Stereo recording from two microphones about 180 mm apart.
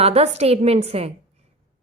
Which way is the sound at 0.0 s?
35° right (ahead or behind).